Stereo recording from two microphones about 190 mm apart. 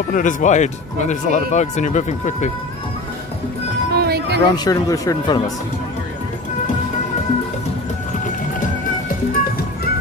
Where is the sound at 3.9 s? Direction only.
55° right (ahead or behind).